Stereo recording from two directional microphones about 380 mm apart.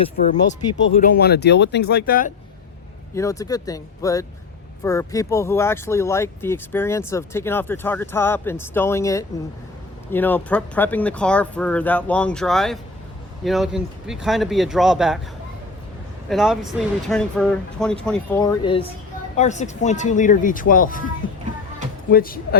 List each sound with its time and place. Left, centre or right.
0.0 s speech: centre
3.2 s speech: centre
16.3 s speech: centre; by 21.0 s left
22.1 s speech: left